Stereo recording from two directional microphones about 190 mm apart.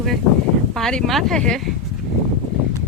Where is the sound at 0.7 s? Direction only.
5° left (ahead or behind).